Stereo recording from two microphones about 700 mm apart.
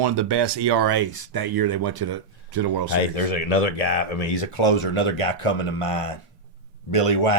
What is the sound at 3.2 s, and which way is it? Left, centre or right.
Speech, left.